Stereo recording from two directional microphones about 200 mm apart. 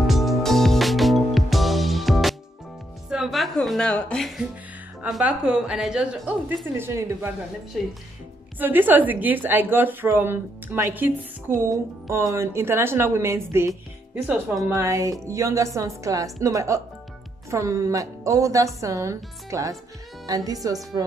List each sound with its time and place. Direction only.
0.0 s music: centre (ahead or behind)
5.0 s a woman's voice: 5° right (ahead or behind)
8.5 s speech: 10° right (ahead or behind)